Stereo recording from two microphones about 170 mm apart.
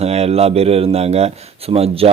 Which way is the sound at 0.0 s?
40° right (ahead or behind).